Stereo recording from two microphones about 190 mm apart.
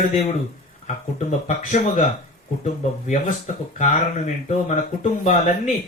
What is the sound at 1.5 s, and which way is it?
Speech, 40° left (ahead or behind).